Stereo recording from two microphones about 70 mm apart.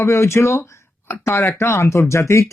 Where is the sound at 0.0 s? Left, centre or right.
Left.